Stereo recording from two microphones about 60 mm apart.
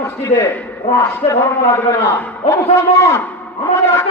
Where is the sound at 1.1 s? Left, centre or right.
Left.